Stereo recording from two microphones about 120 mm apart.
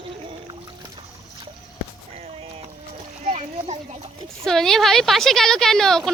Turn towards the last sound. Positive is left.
turn(degrees=5)  # may be behind; listen again after turning